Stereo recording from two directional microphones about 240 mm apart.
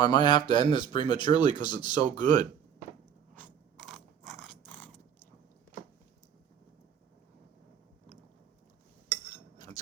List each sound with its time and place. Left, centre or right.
0.0 s speech: centre
3.3 s mechanisms: centre